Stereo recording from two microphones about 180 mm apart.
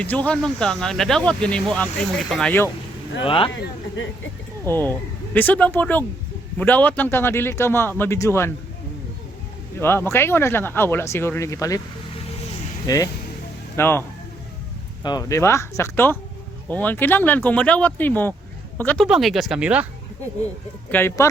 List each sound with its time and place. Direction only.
0.0 s speech: 5° left (ahead or behind)
3.2 s speech: 30° left (ahead or behind)
4.7 s speech: 10° left (ahead or behind)
9.8 s speech: 15° left (ahead or behind)
12.9 s speech: 20° left (ahead or behind)
15.0 s speech: 20° left (ahead or behind)
19.0 s speech: centre (ahead or behind)
20.9 s speech: 10° left (ahead or behind)